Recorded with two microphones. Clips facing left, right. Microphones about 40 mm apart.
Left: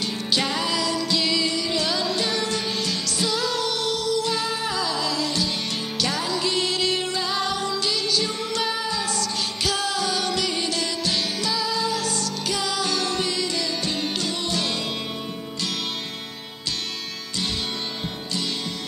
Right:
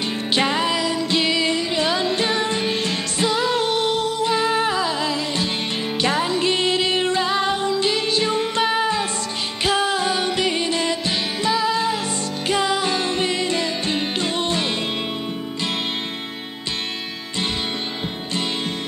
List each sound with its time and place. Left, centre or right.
0.0 s music: right